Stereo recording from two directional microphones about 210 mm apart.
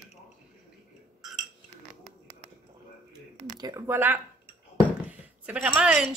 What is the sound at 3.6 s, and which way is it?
A woman's voice, 15° right (ahead or behind).